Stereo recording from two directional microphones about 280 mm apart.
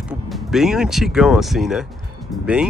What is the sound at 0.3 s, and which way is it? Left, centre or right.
Speech, centre.